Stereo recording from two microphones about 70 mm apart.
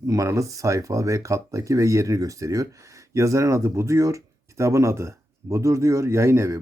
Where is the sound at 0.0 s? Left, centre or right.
Right.